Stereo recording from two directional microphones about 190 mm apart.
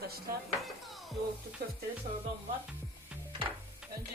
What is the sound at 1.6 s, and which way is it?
Music, 55° right (ahead or behind).